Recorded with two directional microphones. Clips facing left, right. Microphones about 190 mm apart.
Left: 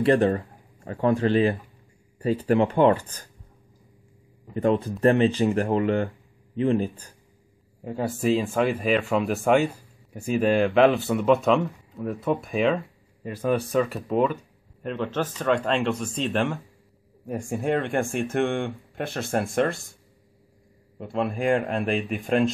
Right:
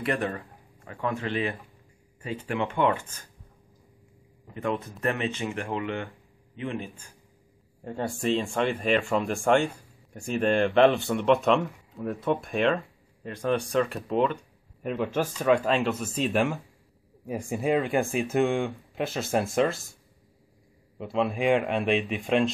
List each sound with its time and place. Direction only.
0.0 s speech: 30° left (ahead or behind)
4.6 s speech: 35° left (ahead or behind)
7.8 s speech: 5° left (ahead or behind)
14.9 s speech: 10° right (ahead or behind)
21.0 s speech: centre (ahead or behind)